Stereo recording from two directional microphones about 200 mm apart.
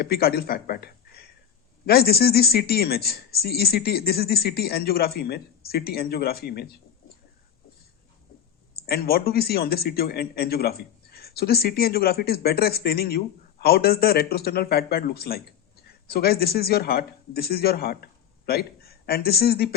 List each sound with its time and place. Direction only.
0.0 s speech: 50° left (ahead or behind)
8.7 s speech: 50° left (ahead or behind)